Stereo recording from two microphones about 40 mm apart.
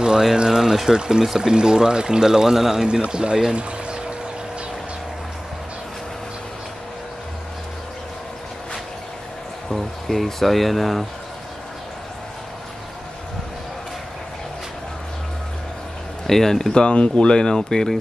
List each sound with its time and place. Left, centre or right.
0.0 s speech: centre
3.5 s pour: right
9.7 s speech: centre
16.3 s speech: centre
16.8 s speech: left